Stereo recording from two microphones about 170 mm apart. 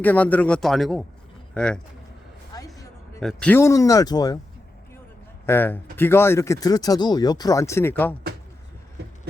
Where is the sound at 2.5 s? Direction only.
20° left (ahead or behind).